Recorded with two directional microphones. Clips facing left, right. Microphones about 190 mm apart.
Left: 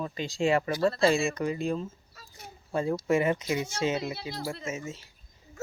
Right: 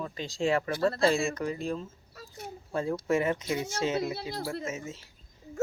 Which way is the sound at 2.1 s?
55° right (ahead or behind).